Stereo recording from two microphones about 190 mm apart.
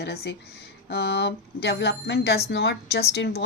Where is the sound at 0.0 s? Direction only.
60° left (ahead or behind).